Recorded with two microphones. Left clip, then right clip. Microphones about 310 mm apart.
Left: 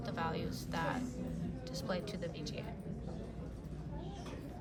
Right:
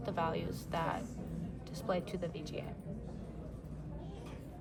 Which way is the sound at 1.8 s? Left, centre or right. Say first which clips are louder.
Right 4 dB; right.